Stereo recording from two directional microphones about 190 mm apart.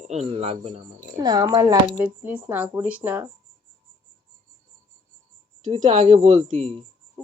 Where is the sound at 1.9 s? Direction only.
5° right (ahead or behind).